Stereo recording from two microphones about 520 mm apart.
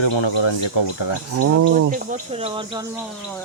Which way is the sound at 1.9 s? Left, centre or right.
Centre.